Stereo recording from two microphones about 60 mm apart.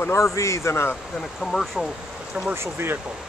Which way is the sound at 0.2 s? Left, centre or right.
Left.